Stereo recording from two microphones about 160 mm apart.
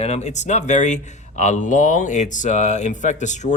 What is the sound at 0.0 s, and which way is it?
A man's voice, 45° left (ahead or behind).